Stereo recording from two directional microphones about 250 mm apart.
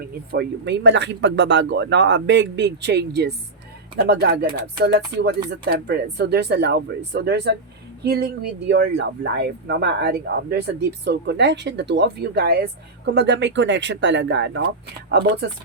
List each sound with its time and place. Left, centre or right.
0.3 s speech: right